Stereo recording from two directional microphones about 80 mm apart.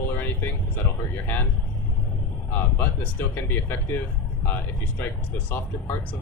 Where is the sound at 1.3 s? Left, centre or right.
Left.